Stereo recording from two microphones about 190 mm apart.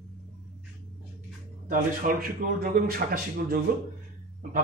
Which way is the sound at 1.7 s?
50° right (ahead or behind).